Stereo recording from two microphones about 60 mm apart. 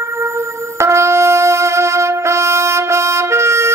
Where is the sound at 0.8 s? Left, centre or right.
Right.